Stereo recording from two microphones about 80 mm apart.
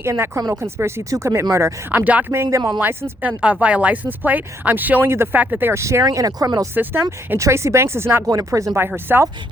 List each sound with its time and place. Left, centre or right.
0.0 s speech: right
1.9 s speech: centre
2.3 s speech: right
5.8 s speech: right
6.7 s speech: right
7.3 s speech: right
8.3 s speech: right
9.1 s speech: right